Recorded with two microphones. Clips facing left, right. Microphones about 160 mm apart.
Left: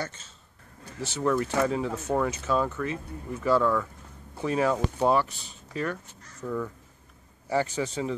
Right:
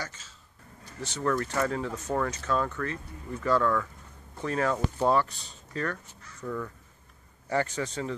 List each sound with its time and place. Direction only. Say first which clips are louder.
1.0 s speech: left 3 dB; 5° left (ahead or behind)